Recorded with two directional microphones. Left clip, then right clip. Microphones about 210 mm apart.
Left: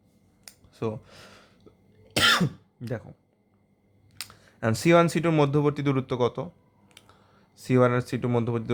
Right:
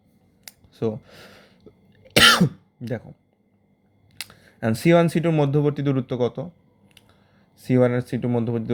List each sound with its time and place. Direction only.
0.4 s a sound: 15° right (ahead or behind)
2.0 s cough: 25° right (ahead or behind)
2.8 s speech: 10° right (ahead or behind)
4.2 s speech: 10° right (ahead or behind)